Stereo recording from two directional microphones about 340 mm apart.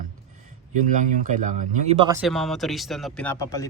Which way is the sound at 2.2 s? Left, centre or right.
Centre.